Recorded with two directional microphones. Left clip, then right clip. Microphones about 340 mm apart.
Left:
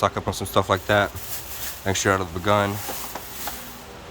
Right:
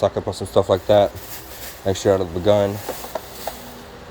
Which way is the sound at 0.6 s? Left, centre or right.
Centre.